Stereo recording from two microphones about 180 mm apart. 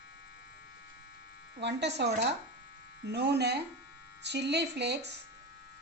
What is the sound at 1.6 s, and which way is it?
Speech, 70° right (ahead or behind).